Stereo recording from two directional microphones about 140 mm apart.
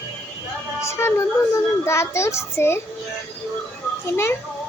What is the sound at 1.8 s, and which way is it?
Speech, 20° left (ahead or behind).